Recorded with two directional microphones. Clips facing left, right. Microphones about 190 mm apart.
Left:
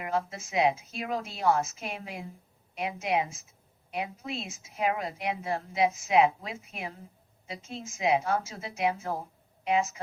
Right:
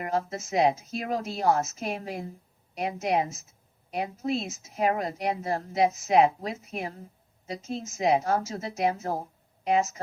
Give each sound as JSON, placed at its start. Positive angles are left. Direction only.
{"t": 0.0, "sound": "a woman's voice", "side_deg": -40}